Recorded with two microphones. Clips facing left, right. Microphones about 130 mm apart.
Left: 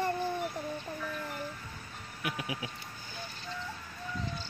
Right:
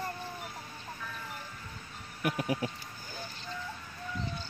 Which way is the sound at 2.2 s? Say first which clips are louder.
Right 6 dB; 45° right (ahead or behind).